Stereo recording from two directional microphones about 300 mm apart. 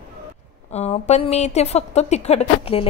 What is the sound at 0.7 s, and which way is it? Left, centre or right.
Speech, left.